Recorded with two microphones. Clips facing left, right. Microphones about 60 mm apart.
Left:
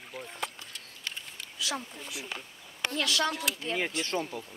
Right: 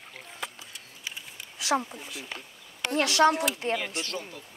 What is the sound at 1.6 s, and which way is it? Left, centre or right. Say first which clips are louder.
Speech: right 8 dB; right.